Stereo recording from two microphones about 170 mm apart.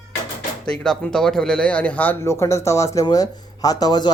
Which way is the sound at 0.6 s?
5° left (ahead or behind).